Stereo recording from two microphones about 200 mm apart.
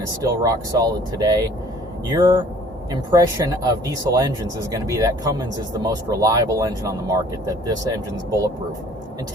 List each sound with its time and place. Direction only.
0.2 s speech: 15° right (ahead or behind)